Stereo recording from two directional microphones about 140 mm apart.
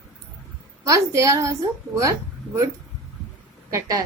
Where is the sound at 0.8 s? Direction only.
20° right (ahead or behind).